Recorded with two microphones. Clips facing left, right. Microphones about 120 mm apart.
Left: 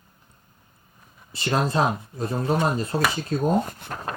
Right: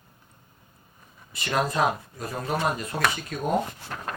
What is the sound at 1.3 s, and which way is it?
Speech, 30° left (ahead or behind).